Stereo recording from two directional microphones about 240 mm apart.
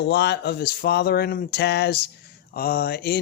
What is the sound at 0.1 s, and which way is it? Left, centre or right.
Speech, left.